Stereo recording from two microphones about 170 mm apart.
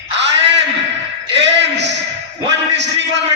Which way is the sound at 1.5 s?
90° right.